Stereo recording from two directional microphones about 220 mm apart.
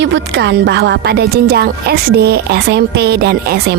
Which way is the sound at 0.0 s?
50° right (ahead or behind).